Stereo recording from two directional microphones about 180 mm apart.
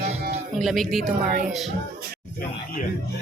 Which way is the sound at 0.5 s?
Centre (ahead or behind).